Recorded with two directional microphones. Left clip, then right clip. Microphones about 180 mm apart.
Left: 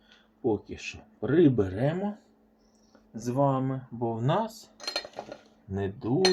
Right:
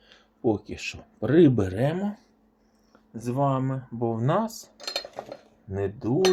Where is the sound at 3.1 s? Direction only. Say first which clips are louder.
Right 1 dB; 35° right (ahead or behind).